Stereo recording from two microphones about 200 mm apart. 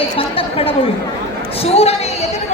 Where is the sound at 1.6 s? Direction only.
30° left (ahead or behind).